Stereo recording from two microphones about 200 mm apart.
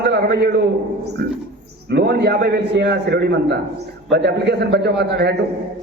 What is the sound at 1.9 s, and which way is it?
A man's voice, 55° right (ahead or behind).